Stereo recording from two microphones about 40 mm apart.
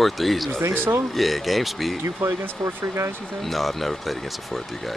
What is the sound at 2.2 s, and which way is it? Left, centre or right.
Speech, right.